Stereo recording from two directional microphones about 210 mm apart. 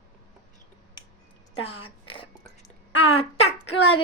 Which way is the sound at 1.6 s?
25° left (ahead or behind).